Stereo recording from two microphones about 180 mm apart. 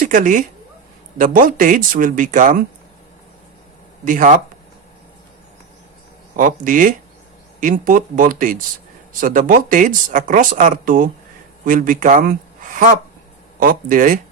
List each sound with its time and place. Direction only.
0.0 s speech: 50° right (ahead or behind)
4.0 s speech: 50° right (ahead or behind)
6.3 s speech: 45° right (ahead or behind)